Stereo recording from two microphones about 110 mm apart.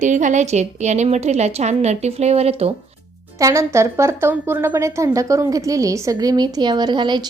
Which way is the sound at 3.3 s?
30° right (ahead or behind).